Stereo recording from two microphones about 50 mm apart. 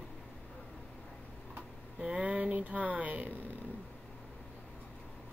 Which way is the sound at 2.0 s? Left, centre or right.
Right.